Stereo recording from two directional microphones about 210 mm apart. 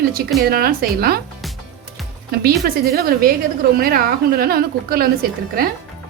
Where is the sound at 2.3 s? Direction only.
45° right (ahead or behind).